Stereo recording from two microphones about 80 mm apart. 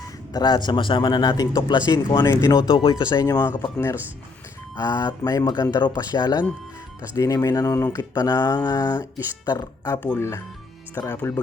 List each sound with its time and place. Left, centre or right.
0.3 s a man's voice: left
2.2 s speech: left
2.6 s speech: left
2.9 s speech: left
3.6 s speech: left
4.8 s speech: left
7.2 s speech: left
8.2 s speech: left
10.2 s speech: left